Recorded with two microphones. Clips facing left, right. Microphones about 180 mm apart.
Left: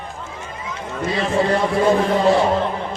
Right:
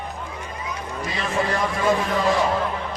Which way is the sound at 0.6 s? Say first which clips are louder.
Left 6 dB; 25° left (ahead or behind).